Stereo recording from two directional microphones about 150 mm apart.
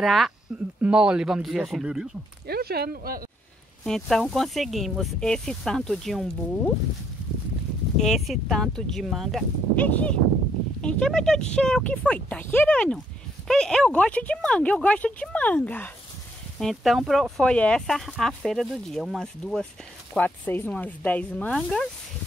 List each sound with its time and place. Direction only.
0.0 s speech: centre (ahead or behind)
2.4 s speech: 90° right
3.8 s speech: centre (ahead or behind)
8.0 s speech: centre (ahead or behind)
9.8 s speech: 10° left (ahead or behind)